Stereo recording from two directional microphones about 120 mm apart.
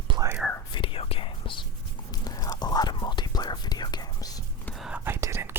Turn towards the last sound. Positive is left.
turn(degrees=-20)  # may be behind; listen again after turning